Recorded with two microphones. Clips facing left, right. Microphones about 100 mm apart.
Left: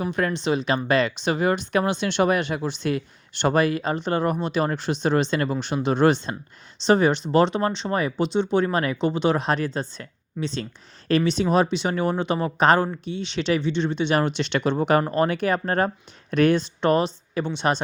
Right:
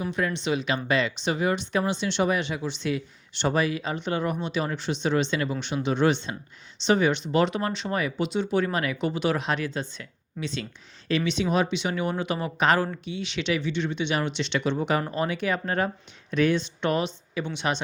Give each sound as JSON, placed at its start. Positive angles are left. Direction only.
{"t": 0.0, "sound": "speech", "side_deg": 50}